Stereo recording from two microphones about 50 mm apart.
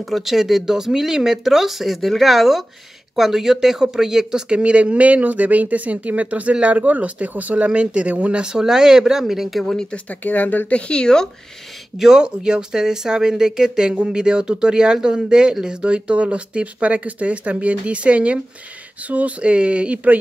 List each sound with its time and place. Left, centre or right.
0.0 s speech: centre
9.8 s speech: centre
10.0 s speech: left
10.7 s speech: left
12.0 s speech: centre